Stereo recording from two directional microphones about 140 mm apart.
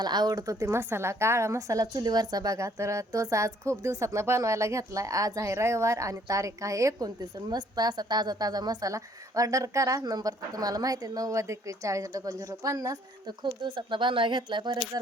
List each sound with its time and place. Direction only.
0.0 s a woman's voice: 30° right (ahead or behind)